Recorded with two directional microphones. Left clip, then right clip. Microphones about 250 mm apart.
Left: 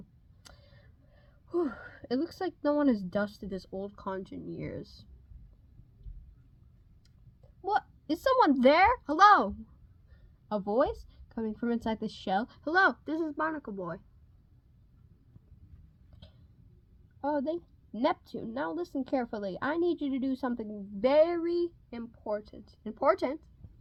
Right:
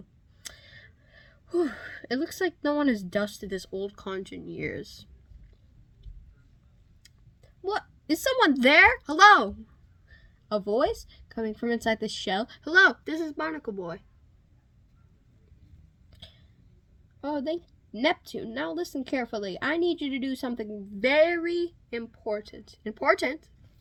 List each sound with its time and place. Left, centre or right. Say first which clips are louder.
0.4 s gasp: right 11 dB; centre
4.0 s a woman's voice: right 2 dB; centre
7.6 s a woman's voice: left 1 dB; centre
17.2 s a woman's voice: right 1 dB; centre